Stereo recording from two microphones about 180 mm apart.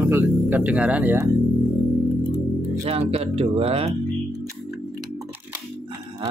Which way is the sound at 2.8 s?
35° right (ahead or behind).